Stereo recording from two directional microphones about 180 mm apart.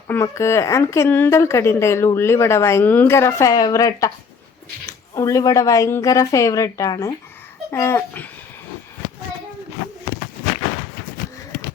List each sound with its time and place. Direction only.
0.1 s a woman's voice: 15° left (ahead or behind)